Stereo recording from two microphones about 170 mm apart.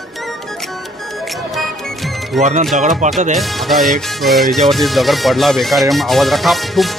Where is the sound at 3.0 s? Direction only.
45° right (ahead or behind).